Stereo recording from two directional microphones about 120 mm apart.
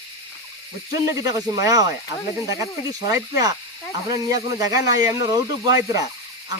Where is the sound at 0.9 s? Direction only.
30° right (ahead or behind).